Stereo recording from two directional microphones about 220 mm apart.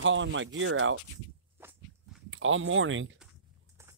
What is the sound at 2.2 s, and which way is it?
Speech, 60° right (ahead or behind).